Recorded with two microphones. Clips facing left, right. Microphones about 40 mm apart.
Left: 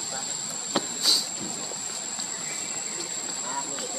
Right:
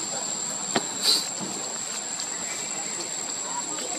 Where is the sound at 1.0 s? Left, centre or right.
Centre.